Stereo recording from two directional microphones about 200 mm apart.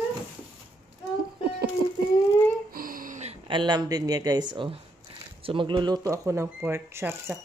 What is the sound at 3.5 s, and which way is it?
Speech, 20° right (ahead or behind).